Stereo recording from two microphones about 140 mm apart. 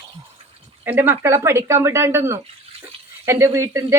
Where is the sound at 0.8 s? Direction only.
15° right (ahead or behind).